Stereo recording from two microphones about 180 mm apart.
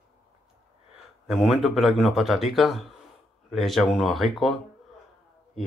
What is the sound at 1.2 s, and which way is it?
Speech, centre (ahead or behind).